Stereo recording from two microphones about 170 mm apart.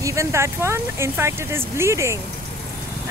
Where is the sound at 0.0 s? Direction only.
20° right (ahead or behind).